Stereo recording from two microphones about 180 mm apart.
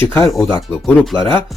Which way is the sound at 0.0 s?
10° left (ahead or behind).